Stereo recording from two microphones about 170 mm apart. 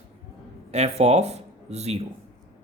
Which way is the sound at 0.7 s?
40° right (ahead or behind).